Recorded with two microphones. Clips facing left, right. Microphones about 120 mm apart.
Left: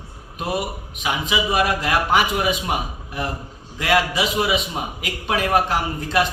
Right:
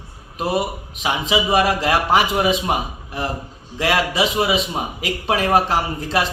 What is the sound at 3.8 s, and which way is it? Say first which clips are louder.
A man's voice: right 1 dB; 30° right (ahead or behind).